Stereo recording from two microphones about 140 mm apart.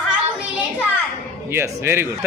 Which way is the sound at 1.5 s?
15° right (ahead or behind).